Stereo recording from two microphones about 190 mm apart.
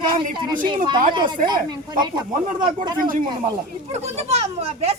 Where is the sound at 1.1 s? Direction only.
25° right (ahead or behind).